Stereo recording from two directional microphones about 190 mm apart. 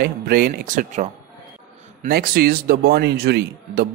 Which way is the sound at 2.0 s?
50° right (ahead or behind).